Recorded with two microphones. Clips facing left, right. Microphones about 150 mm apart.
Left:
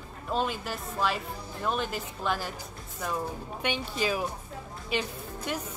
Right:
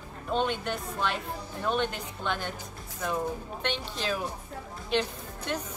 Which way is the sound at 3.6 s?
10° left (ahead or behind).